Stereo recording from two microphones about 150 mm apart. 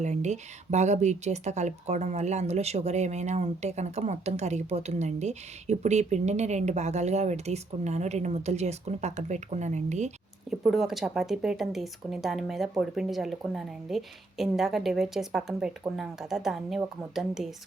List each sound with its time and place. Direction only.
0.0 s speech: 50° right (ahead or behind)
10.5 s speech: centre (ahead or behind)